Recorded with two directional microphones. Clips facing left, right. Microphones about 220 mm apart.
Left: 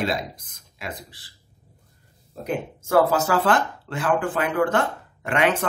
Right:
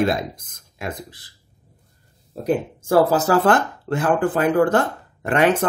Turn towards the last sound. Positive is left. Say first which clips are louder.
# right 4 dB
turn(degrees=-40)  # may be behind; listen again after turning